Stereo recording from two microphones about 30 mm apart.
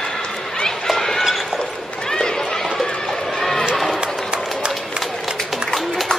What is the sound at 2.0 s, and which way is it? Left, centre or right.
Run, centre.